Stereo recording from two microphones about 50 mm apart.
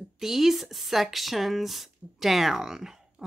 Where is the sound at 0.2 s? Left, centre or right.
Centre.